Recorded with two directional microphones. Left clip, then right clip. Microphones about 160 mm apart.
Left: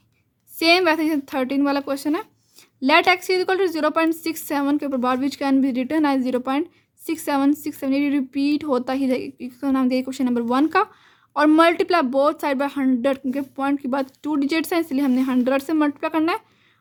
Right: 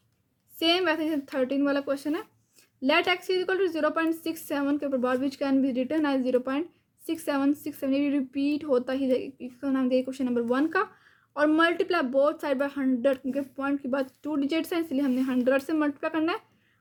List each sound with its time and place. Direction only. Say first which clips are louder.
0.6 s a woman's voice: left 8 dB; 45° left (ahead or behind)